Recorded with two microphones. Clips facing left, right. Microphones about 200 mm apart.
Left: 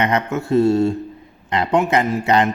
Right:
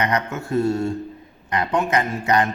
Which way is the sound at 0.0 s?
25° left (ahead or behind).